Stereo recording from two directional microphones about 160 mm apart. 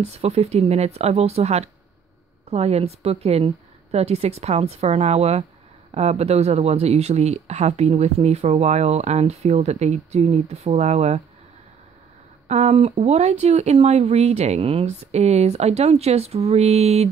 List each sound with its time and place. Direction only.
0.0 s a woman's voice: 40° right (ahead or behind)
12.4 s speech: 45° right (ahead or behind)